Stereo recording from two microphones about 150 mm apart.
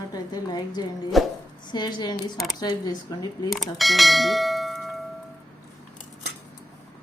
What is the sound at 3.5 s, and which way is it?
Speech, centre (ahead or behind).